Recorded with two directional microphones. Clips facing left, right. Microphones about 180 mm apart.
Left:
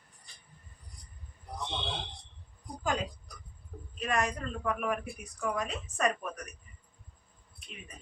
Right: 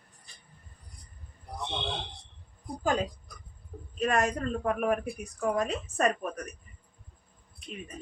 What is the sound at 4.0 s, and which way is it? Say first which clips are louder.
A woman's voice: right 5 dB; 45° right (ahead or behind).